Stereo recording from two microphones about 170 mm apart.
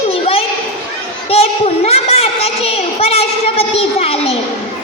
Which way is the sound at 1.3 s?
35° left (ahead or behind).